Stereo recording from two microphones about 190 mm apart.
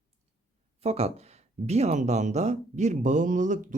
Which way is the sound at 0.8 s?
35° right (ahead or behind).